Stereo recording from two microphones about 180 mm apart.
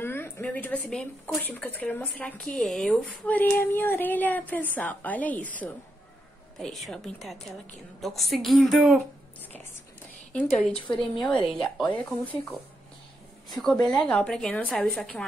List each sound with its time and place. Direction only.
0.0 s a woman's voice: 10° left (ahead or behind)
11.0 s a woman's voice: 5° left (ahead or behind)